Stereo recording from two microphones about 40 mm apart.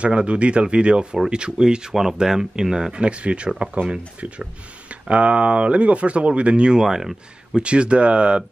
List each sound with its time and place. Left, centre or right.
0.0 s speech: right
2.9 s speech: right
5.1 s speech: right
6.8 s speech: centre
7.6 s speech: right